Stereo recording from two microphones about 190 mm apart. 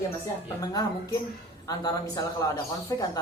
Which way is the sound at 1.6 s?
20° left (ahead or behind).